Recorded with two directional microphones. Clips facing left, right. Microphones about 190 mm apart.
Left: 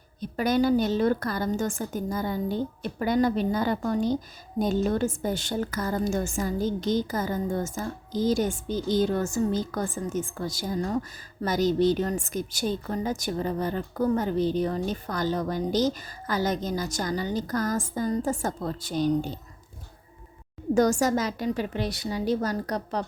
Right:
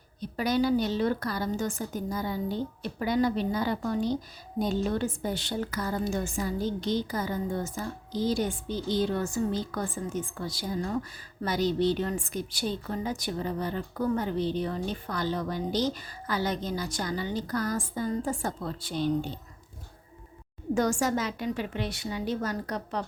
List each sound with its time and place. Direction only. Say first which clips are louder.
0.2 s a woman's voice: left 3 dB; 50° left (ahead or behind)
20.7 s a woman's voice: left 4 dB; 40° left (ahead or behind)